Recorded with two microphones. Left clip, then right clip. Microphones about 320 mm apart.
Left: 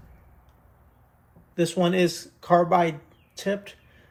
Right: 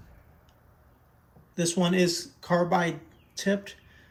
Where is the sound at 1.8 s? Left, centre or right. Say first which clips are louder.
Left 2 dB; centre.